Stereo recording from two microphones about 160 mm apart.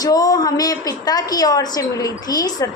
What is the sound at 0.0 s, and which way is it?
A woman's voice, 25° left (ahead or behind).